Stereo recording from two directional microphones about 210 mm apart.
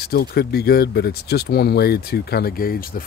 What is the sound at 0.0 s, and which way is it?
Speech, 50° left (ahead or behind).